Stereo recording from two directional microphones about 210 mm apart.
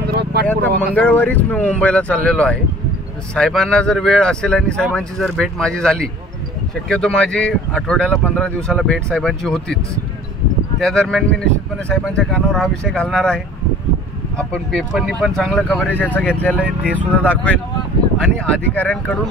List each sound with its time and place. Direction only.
0.0 s vehicle: 50° right (ahead or behind)
0.9 s speech: 10° left (ahead or behind)
10.8 s speech: centre (ahead or behind)